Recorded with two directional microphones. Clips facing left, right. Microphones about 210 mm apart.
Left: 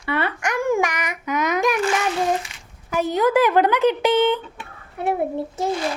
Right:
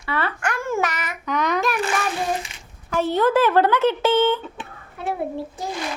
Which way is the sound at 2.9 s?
15° left (ahead or behind).